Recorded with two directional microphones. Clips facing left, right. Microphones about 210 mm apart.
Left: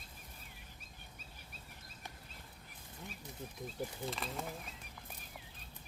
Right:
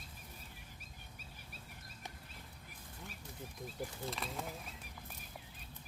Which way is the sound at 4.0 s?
Centre (ahead or behind).